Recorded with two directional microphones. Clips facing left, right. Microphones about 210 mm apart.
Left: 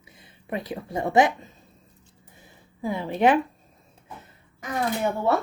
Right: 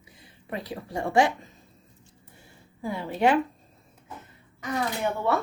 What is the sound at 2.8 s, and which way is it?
Speech, 20° left (ahead or behind).